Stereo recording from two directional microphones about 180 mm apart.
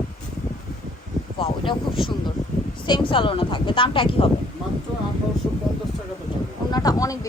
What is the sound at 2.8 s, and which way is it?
A woman's voice, 25° left (ahead or behind).